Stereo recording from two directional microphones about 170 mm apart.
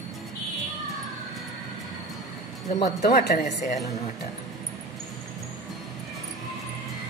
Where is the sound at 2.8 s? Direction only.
75° left (ahead or behind).